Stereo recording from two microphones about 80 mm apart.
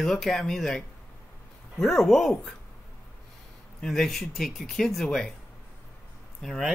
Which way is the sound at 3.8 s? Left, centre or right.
Centre.